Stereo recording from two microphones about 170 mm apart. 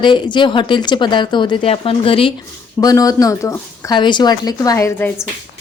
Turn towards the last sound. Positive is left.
turn(degrees=15)  # may be behind; listen again after turning